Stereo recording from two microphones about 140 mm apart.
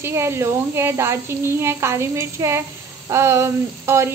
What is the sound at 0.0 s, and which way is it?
Speech, 20° right (ahead or behind).